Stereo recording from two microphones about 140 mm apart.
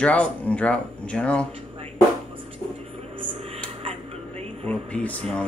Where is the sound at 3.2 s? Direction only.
40° right (ahead or behind).